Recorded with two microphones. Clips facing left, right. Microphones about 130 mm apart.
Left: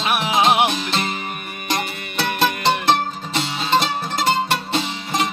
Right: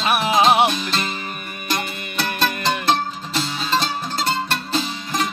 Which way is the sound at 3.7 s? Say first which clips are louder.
Left 4 dB; 20° left (ahead or behind).